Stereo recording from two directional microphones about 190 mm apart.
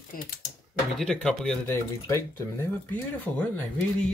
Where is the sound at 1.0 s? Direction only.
5° left (ahead or behind).